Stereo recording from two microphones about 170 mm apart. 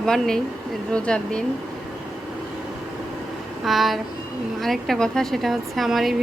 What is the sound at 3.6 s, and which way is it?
A woman's voice, centre (ahead or behind).